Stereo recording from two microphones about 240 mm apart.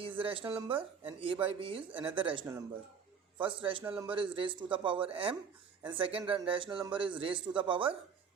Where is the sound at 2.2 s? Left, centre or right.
Right.